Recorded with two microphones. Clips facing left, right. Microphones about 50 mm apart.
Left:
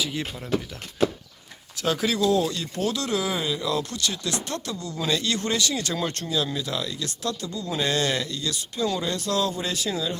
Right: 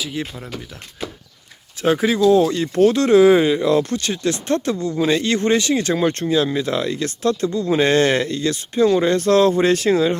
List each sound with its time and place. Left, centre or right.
0.0 s speech: centre
1.8 s speech: right